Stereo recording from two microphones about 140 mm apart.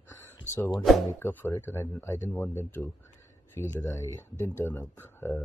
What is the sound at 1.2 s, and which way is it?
Speech, 15° left (ahead or behind).